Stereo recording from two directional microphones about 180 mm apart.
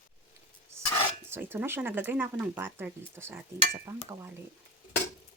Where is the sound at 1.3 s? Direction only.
10° right (ahead or behind).